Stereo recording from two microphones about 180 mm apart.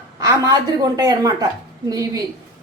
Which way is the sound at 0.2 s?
20° right (ahead or behind).